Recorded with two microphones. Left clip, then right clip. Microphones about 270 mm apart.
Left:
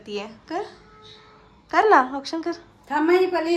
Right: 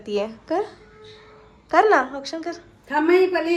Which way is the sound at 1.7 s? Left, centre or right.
Centre.